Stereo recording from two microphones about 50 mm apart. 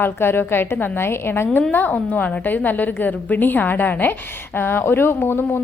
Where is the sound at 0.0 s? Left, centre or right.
Left.